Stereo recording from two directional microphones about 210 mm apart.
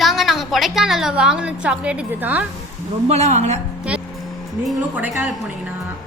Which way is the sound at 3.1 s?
30° right (ahead or behind).